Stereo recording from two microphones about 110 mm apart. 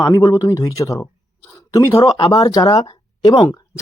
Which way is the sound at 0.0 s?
35° left (ahead or behind).